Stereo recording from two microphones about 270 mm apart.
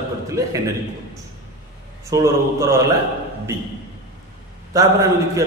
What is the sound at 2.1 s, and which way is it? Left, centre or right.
Speech, centre.